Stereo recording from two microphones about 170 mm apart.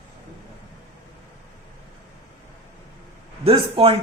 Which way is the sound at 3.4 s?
35° right (ahead or behind).